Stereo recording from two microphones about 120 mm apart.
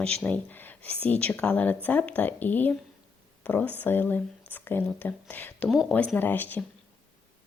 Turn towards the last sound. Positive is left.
turn(degrees=15)  # may be behind; listen again after turning